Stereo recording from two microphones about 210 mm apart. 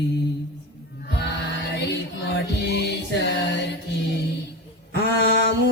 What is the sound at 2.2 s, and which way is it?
Music, 55° left (ahead or behind).